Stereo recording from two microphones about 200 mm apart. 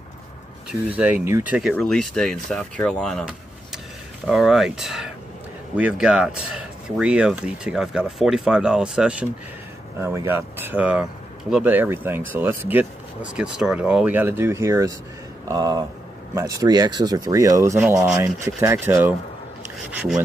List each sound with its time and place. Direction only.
0.7 s speech: 5° right (ahead or behind)